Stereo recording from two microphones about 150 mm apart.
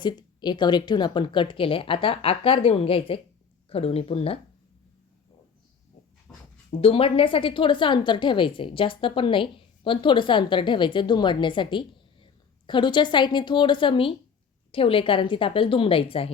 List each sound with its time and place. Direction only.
0.0 s a woman's voice: 30° left (ahead or behind)
6.3 s writing: 10° left (ahead or behind)
6.7 s a woman's voice: 40° left (ahead or behind)